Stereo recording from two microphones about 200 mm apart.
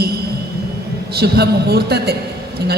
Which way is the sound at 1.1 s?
55° right (ahead or behind).